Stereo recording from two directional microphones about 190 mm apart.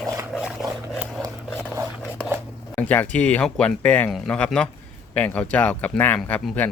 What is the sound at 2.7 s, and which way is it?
Speech, 10° left (ahead or behind).